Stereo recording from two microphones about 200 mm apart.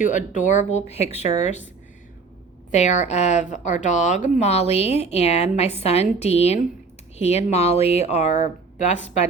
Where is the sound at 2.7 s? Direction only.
35° left (ahead or behind).